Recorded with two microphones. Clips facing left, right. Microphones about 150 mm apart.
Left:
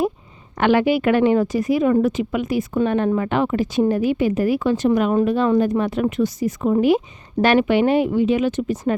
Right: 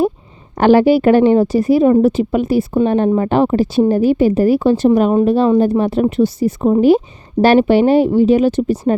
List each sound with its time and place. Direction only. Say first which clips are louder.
0.5 s a woman's voice: right 7 dB; 35° right (ahead or behind)